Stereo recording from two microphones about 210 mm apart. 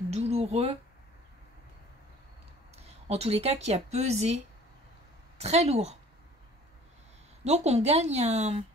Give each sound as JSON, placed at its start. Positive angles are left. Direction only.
{"t": 0.1, "sound": "speech", "side_deg": -30}
{"t": 2.7, "sound": "a sound", "side_deg": -30}
{"t": 3.6, "sound": "speech", "side_deg": -30}
{"t": 5.4, "sound": "speech", "side_deg": -30}
{"t": 7.4, "sound": "speech", "side_deg": -30}